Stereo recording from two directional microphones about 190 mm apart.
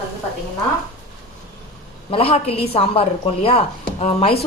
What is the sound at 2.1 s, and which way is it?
A woman's voice, 30° left (ahead or behind).